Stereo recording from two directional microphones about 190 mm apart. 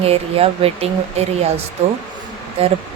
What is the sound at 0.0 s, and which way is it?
A woman's voice, 30° right (ahead or behind).